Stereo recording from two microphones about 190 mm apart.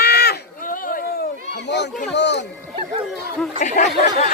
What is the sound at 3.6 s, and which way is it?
Speech, 40° left (ahead or behind).